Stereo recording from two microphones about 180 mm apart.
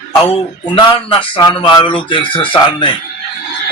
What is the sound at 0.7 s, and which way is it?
Speech, 25° left (ahead or behind).